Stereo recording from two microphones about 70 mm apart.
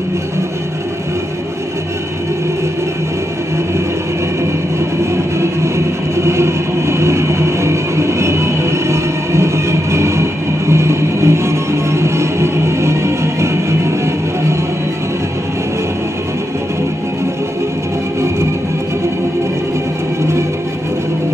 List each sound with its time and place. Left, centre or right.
5.1 s train: right